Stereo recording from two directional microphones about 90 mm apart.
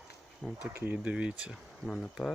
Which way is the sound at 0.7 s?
15° right (ahead or behind).